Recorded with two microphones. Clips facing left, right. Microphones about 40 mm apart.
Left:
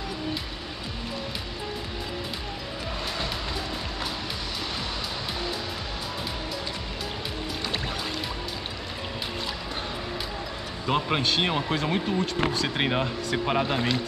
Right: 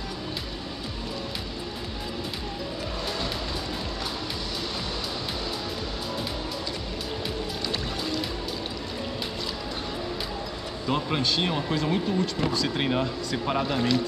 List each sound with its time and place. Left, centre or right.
10.9 s speech: left
12.6 s speech: left